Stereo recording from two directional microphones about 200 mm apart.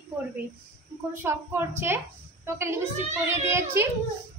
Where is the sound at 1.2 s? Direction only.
10° right (ahead or behind).